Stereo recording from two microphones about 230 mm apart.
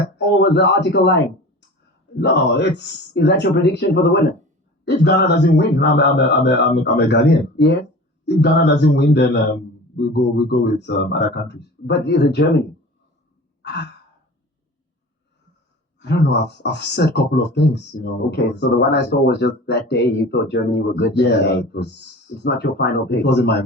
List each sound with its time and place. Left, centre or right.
0.2 s speech: left
13.6 s sigh: left
16.0 s speech: left